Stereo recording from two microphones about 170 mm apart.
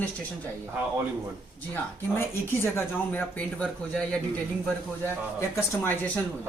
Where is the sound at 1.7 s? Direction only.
15° left (ahead or behind).